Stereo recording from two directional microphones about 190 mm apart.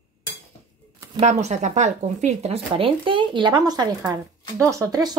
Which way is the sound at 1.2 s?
35° right (ahead or behind).